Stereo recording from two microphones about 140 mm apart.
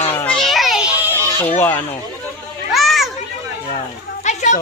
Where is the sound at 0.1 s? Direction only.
10° left (ahead or behind).